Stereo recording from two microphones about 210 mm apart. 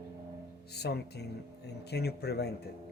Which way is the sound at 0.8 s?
50° left (ahead or behind).